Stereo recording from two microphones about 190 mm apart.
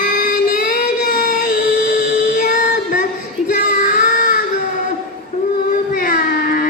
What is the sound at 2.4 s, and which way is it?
Child singing, 45° left (ahead or behind).